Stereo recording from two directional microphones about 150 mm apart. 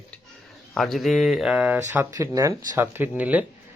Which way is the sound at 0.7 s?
Centre (ahead or behind).